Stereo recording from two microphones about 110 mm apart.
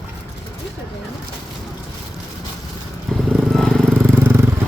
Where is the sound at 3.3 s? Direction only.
Centre (ahead or behind).